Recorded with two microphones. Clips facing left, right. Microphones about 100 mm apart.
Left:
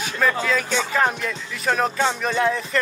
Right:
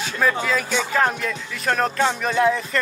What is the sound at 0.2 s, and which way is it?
Speech, 5° right (ahead or behind).